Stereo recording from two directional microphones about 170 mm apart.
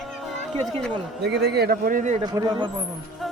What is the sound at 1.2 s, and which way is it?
Speech, 80° right.